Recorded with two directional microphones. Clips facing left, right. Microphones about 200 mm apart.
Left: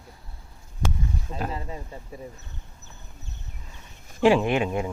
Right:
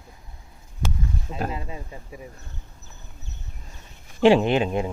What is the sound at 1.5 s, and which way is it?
Speech, 15° right (ahead or behind).